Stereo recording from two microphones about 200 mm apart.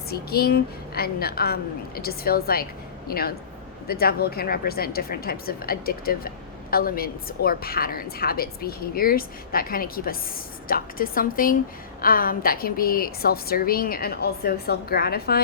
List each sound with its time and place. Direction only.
0.1 s speech: 50° left (ahead or behind)